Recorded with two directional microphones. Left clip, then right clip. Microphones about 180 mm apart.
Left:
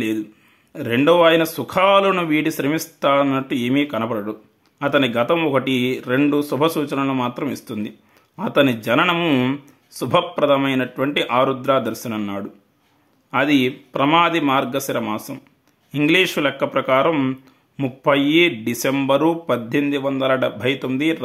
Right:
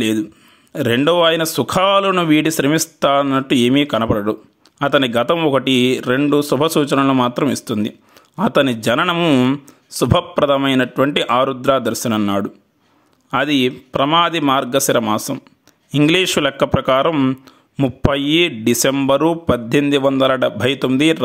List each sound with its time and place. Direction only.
0.0 s speech: 40° right (ahead or behind)